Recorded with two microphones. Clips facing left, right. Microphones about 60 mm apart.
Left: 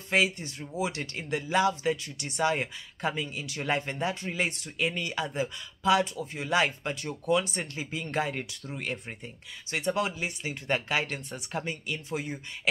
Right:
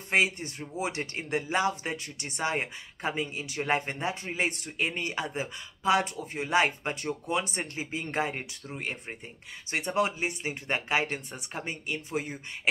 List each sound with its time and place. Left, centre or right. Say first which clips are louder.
0.1 s speech: even; right
9.7 s speech: right 1 dB; right